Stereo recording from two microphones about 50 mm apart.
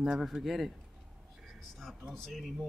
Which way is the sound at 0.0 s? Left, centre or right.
Centre.